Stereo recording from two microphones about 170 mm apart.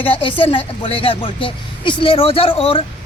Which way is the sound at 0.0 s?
30° left (ahead or behind).